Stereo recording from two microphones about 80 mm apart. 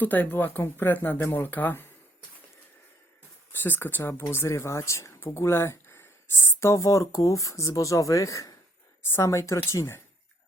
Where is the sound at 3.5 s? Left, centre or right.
Left.